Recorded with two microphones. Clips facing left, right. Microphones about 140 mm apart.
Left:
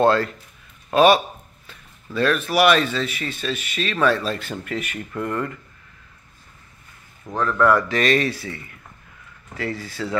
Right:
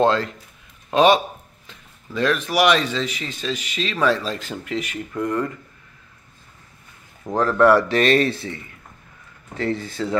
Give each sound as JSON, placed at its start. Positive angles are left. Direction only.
{"t": 0.0, "sound": "speech", "side_deg": -20}
{"t": 7.3, "sound": "speech", "side_deg": -35}